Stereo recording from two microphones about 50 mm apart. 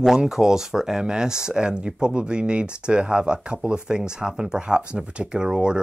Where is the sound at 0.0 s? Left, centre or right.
Centre.